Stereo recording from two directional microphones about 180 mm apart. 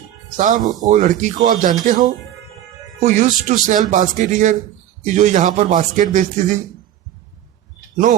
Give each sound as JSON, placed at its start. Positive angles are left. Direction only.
{"t": 0.3, "sound": "speech", "side_deg": -45}
{"t": 0.6, "sound": "speech", "side_deg": -20}
{"t": 0.9, "sound": "speech", "side_deg": -45}